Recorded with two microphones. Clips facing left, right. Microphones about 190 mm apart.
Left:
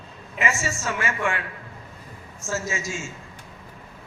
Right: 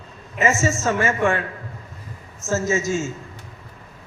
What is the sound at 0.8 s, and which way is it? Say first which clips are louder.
Speech: right 6 dB; 40° right (ahead or behind).